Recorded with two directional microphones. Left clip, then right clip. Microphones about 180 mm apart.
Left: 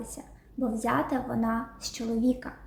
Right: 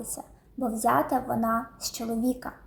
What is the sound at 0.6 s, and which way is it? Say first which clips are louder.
A woman's voice: right 4 dB; 10° left (ahead or behind).